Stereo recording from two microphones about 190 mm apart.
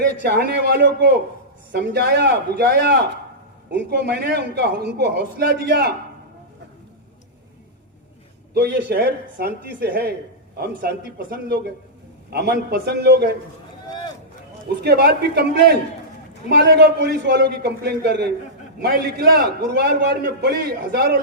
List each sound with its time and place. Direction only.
0.0 s a man's voice: 60° right (ahead or behind)
8.5 s a man's voice: 60° right (ahead or behind)
14.8 s a man's voice: 60° right (ahead or behind)
20.4 s a man's voice: 55° right (ahead or behind)